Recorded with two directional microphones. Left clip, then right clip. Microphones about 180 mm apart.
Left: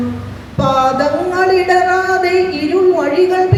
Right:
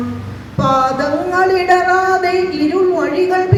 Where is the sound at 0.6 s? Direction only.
15° right (ahead or behind).